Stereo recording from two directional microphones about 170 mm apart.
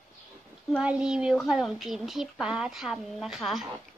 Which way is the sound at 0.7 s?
5° right (ahead or behind).